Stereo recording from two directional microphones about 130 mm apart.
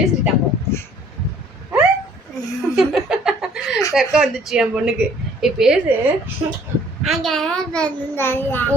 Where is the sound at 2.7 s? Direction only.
5° right (ahead or behind).